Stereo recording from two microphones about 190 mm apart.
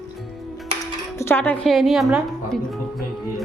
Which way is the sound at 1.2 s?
10° left (ahead or behind).